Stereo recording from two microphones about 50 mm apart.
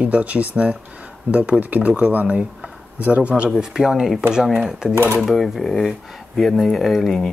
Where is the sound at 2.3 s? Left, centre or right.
Centre.